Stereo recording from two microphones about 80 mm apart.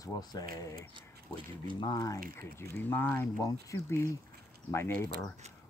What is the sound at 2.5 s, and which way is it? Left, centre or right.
Speech, left.